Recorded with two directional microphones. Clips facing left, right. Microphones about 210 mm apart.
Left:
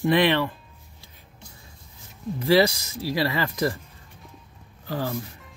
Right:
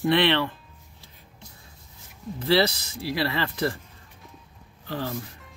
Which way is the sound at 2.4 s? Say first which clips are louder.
Left 3 dB; 15° left (ahead or behind).